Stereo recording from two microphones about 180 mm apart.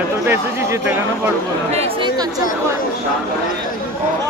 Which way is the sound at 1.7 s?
30° right (ahead or behind).